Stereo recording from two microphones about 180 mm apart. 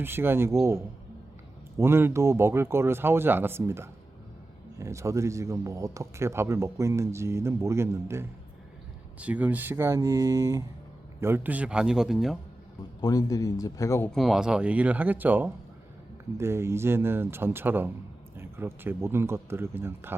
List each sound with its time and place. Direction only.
0.0 s a man's voice: 10° right (ahead or behind)
13.0 s speech: 20° left (ahead or behind)
14.1 s a man's voice: centre (ahead or behind)